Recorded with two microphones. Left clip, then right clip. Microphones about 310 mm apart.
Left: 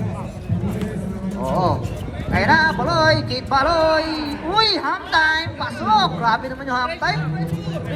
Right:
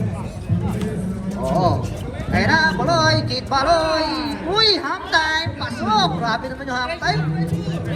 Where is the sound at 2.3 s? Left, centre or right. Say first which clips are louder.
Left 1 dB; centre.